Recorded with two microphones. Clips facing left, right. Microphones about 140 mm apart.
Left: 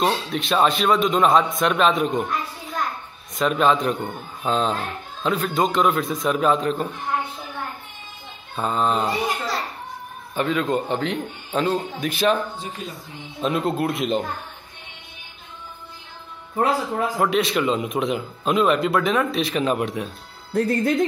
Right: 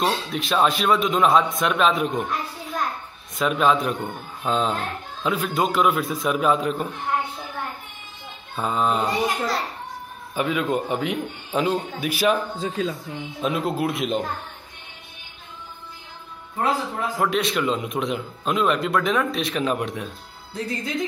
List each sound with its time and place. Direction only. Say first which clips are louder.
0.0 s speech: left 2 dB; centre (ahead or behind)
3.3 s speech: left 1 dB; centre (ahead or behind)
8.6 s a man's voice: left 1 dB; 5° right (ahead or behind)
12.8 s speech: right 12 dB; 90° right
13.4 s speech: left 2 dB; centre (ahead or behind)
17.2 s speech: left 1 dB; centre (ahead or behind)
20.5 s speech: left 8 dB; 60° left (ahead or behind)